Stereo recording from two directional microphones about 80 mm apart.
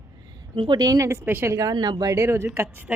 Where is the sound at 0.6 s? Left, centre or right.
Right.